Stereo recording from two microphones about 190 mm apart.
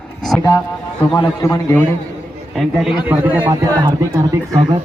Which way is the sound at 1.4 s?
10° left (ahead or behind).